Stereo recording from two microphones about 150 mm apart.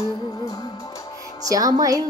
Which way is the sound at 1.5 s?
25° right (ahead or behind).